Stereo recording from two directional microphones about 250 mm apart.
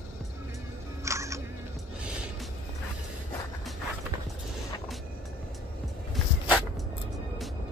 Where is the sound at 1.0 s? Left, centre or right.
Centre.